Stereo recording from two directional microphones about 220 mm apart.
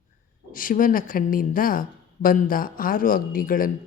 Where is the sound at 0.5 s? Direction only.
40° left (ahead or behind).